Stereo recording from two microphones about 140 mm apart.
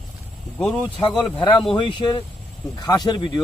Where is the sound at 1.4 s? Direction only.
35° left (ahead or behind).